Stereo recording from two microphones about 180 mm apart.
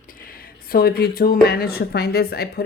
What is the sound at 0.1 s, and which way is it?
Speech, 50° left (ahead or behind).